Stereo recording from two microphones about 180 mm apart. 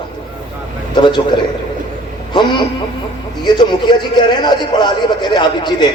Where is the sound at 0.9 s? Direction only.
25° left (ahead or behind).